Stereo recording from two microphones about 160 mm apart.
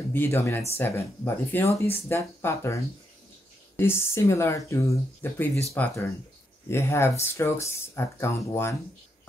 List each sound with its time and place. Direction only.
0.1 s speech: 15° left (ahead or behind)